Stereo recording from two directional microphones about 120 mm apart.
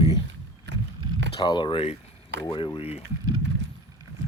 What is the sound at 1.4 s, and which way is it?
Speech, 40° left (ahead or behind).